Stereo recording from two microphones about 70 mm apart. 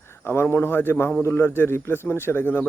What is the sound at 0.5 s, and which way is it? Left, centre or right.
Speech, left.